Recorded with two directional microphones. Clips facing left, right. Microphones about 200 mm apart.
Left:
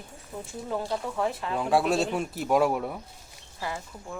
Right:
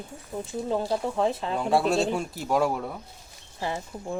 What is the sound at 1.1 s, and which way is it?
Speech, 25° right (ahead or behind).